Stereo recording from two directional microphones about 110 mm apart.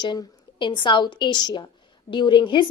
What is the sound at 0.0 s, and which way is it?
A woman's voice, 45° left (ahead or behind).